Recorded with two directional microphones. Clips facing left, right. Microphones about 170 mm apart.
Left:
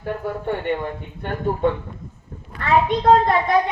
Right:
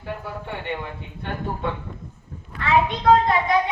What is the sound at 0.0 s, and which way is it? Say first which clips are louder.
Speech: left 6 dB; 45° left (ahead or behind).